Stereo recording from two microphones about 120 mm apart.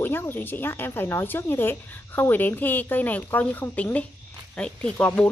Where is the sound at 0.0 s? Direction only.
20° left (ahead or behind).